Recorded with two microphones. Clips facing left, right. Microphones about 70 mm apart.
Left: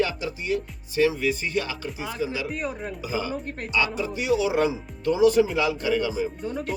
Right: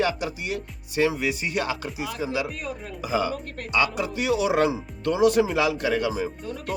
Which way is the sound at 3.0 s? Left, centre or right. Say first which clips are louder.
Right 5 dB; right.